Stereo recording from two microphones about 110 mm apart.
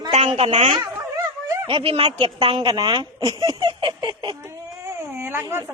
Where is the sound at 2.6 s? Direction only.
45° right (ahead or behind).